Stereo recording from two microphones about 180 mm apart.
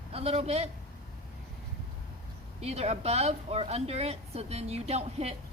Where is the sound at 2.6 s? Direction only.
35° right (ahead or behind).